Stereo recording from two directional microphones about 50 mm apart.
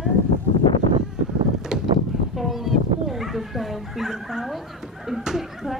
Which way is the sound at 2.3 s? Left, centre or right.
Centre.